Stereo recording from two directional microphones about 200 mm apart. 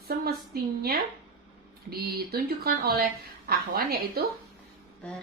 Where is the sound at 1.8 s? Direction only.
50° right (ahead or behind).